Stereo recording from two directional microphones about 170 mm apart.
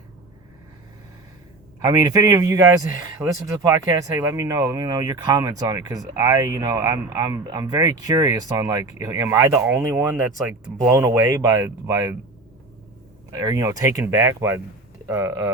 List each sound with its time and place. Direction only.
1.8 s speech: 20° right (ahead or behind)
13.3 s speech: 20° right (ahead or behind)